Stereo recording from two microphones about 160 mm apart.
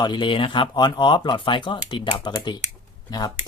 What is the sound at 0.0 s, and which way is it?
Speech, 30° left (ahead or behind).